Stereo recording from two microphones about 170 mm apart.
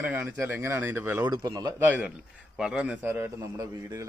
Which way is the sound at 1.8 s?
10° right (ahead or behind).